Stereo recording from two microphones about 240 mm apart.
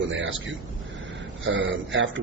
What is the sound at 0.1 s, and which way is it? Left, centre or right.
A man's voice, right.